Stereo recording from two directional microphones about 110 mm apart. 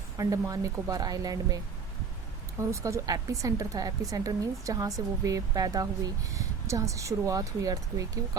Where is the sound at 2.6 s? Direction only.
25° right (ahead or behind).